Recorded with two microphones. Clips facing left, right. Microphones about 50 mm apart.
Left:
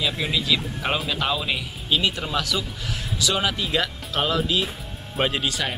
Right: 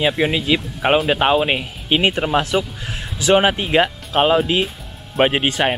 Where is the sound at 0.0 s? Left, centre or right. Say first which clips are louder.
Right 7 dB; right.